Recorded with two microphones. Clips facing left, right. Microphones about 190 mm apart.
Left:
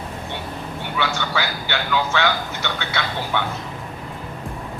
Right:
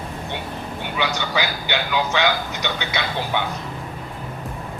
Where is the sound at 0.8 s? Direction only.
15° right (ahead or behind).